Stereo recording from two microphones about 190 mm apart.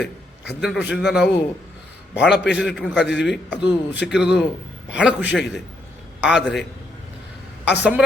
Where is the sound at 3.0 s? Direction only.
65° left (ahead or behind).